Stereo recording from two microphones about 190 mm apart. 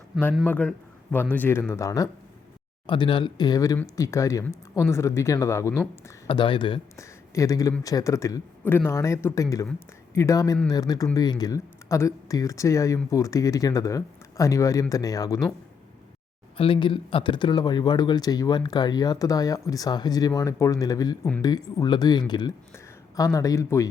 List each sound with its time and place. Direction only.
0.4 s speech: 5° left (ahead or behind)
6.2 s speech: 25° left (ahead or behind)
6.9 s speech: 15° left (ahead or behind)
16.6 s speech: 30° left (ahead or behind)